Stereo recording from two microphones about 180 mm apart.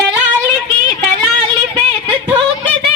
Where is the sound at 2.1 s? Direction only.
30° right (ahead or behind).